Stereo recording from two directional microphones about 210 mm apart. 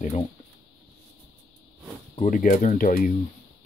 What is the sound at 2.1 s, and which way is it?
Speech, 40° left (ahead or behind).